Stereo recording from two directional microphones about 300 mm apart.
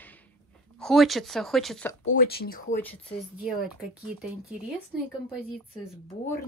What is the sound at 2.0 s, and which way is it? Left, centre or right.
Speech, left.